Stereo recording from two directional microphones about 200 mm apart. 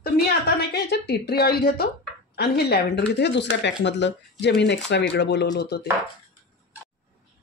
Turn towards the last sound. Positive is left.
turn(degrees=55)  # may be behind; listen again after turning